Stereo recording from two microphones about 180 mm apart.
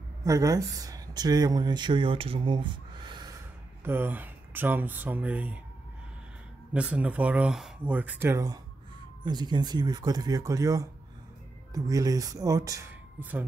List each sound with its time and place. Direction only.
0.2 s speech: 20° right (ahead or behind)
3.8 s speech: 10° right (ahead or behind)
6.7 s speech: 5° right (ahead or behind)